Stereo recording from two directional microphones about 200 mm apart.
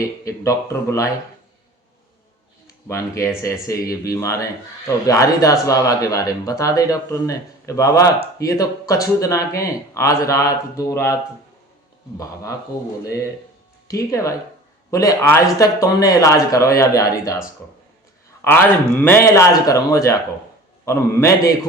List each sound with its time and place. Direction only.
0.3 s speech: 15° left (ahead or behind)
2.6 s speech: 15° left (ahead or behind)
13.8 s speech: 15° left (ahead or behind)
18.4 s speech: 10° left (ahead or behind)